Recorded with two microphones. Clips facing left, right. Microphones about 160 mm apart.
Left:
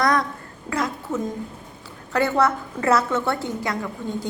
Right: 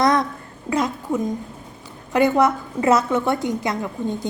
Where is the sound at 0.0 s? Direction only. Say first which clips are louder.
Right 3 dB; 20° right (ahead or behind).